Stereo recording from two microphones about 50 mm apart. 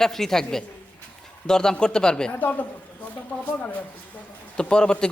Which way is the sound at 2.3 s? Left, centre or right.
Left.